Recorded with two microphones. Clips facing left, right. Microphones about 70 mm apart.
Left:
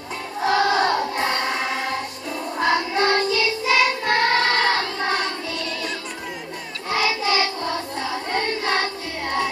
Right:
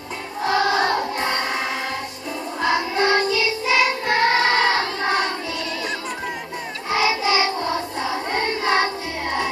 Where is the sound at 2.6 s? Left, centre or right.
Centre.